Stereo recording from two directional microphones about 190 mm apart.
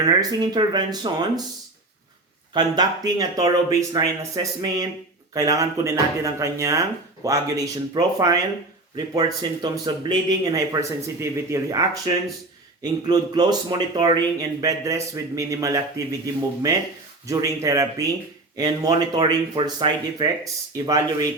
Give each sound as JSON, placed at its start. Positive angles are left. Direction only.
{"t": 0.0, "sound": "speech", "side_deg": -20}
{"t": 2.5, "sound": "speech", "side_deg": -20}